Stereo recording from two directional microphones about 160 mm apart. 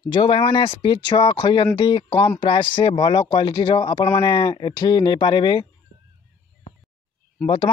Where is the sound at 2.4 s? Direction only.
30° left (ahead or behind).